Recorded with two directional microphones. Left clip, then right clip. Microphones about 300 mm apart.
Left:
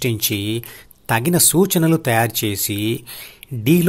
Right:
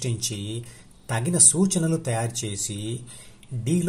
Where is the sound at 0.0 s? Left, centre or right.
Left.